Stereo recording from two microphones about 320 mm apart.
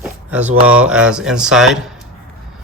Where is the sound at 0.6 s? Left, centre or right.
Centre.